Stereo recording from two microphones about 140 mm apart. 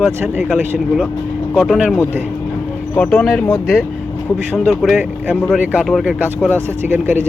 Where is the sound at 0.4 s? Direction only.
5° right (ahead or behind).